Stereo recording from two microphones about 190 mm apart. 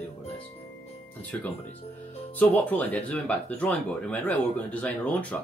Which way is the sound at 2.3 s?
10° left (ahead or behind).